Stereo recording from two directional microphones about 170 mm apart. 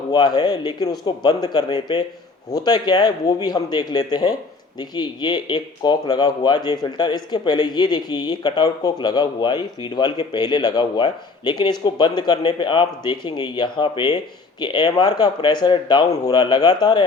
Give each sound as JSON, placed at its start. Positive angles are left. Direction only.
{"t": 0.1, "sound": "speech", "side_deg": 25}